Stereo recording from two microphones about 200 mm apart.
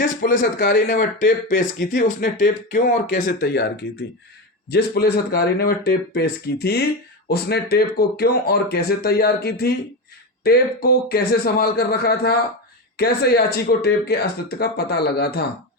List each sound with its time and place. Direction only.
0.0 s speech: 40° left (ahead or behind)
4.7 s speech: 50° left (ahead or behind)